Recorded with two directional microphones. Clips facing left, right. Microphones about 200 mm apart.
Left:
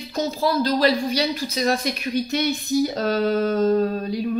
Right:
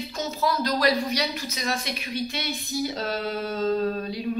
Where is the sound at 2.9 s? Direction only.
50° left (ahead or behind).